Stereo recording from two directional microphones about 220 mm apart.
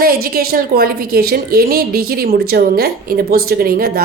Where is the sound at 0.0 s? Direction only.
40° right (ahead or behind).